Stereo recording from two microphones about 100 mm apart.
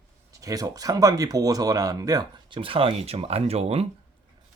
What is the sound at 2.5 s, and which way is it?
Speech, 65° right (ahead or behind).